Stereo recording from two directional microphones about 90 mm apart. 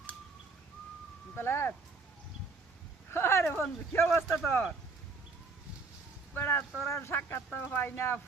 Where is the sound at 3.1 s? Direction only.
30° left (ahead or behind).